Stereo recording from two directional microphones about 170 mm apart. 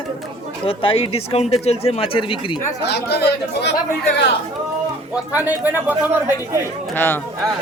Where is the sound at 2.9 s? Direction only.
75° left (ahead or behind).